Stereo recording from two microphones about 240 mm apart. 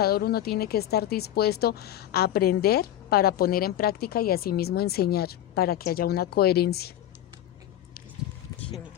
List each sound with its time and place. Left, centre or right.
0.0 s speech: left